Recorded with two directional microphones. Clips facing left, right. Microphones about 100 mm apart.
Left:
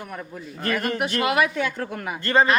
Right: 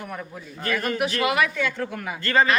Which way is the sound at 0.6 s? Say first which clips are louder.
Even; 45° left (ahead or behind).